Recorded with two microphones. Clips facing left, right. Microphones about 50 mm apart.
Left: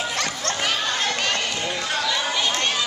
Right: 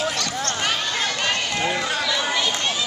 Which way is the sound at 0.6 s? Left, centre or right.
Centre.